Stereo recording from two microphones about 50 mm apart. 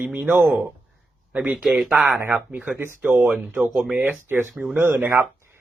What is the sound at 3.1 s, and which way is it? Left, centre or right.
Speech, right.